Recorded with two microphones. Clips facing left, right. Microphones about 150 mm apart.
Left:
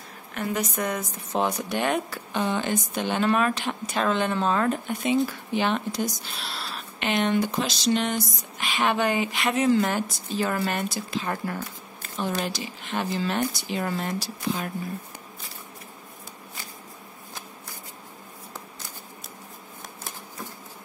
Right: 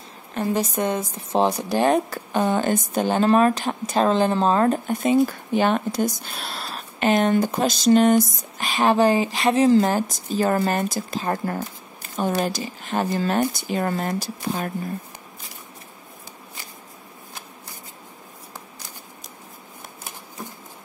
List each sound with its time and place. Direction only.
0.3 s a woman's voice: 30° right (ahead or behind); by 14.7 s 45° right (ahead or behind)